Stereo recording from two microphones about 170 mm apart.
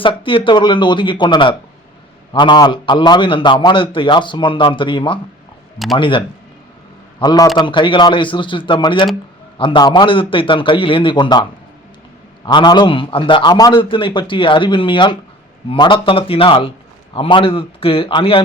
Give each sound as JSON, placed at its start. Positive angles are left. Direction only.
{"t": 0.0, "sound": "a man's voice", "side_deg": 30}
{"t": 12.5, "sound": "a man's voice", "side_deg": 25}